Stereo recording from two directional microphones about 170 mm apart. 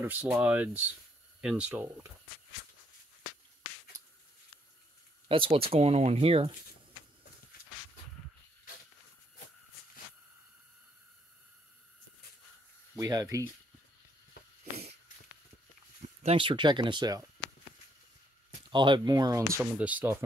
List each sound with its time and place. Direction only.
0.0 s speech: 10° right (ahead or behind)
5.3 s speech: 35° right (ahead or behind)
12.9 s speech: 20° right (ahead or behind)
16.2 s speech: 35° right (ahead or behind)
18.7 s speech: 30° right (ahead or behind); by 20.2 s 10° right (ahead or behind)